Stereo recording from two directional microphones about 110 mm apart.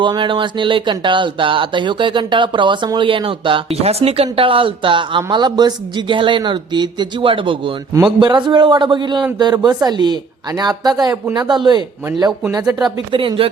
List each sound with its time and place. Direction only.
0.0 s speech: 45° right (ahead or behind)
13.1 s speech: 50° right (ahead or behind)